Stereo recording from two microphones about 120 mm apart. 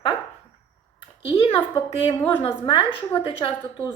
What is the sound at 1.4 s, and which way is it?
Speech, 50° left (ahead or behind).